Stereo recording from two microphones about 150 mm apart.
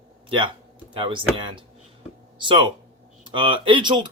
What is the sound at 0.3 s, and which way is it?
Speech, 35° right (ahead or behind).